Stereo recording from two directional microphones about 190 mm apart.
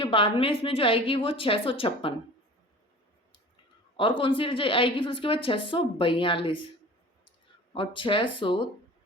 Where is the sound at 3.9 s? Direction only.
25° left (ahead or behind).